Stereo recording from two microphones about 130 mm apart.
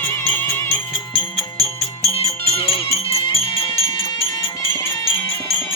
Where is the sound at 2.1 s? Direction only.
50° left (ahead or behind).